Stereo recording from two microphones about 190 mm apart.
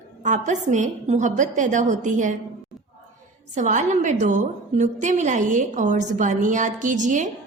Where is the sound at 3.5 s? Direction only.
40° right (ahead or behind).